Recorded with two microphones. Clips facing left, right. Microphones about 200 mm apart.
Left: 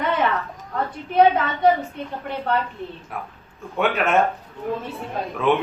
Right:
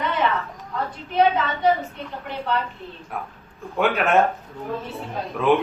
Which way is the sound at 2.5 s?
55° left (ahead or behind).